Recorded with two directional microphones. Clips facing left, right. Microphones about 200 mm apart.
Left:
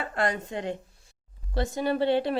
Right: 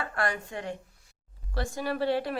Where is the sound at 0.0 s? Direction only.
20° left (ahead or behind).